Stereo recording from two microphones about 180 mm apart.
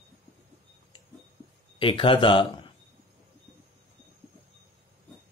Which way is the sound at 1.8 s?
30° left (ahead or behind).